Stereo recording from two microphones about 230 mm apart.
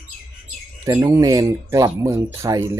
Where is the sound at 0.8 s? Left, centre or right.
Centre.